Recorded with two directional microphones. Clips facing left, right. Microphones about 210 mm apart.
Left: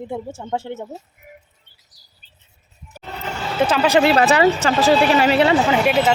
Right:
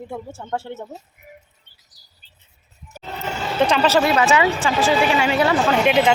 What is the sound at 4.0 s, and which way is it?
A woman's voice, 35° left (ahead or behind).